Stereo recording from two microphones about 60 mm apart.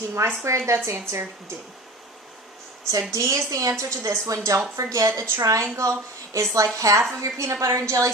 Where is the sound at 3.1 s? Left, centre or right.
Right.